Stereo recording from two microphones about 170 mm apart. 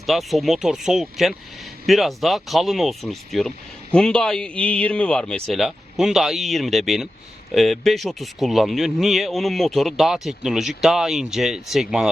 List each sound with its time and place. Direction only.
0.0 s speech: centre (ahead or behind)